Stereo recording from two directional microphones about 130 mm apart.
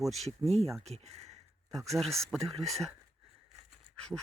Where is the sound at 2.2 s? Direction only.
5° left (ahead or behind).